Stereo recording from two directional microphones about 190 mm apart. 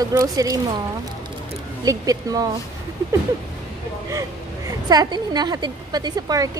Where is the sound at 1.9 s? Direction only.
20° right (ahead or behind).